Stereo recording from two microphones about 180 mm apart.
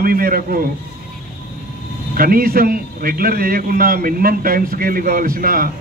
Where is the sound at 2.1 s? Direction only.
55° right (ahead or behind).